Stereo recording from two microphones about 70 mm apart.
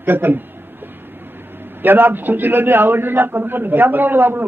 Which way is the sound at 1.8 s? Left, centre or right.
Right.